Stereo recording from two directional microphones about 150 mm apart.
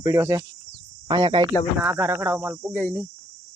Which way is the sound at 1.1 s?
30° right (ahead or behind).